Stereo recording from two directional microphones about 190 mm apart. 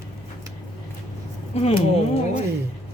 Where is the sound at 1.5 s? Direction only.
30° left (ahead or behind).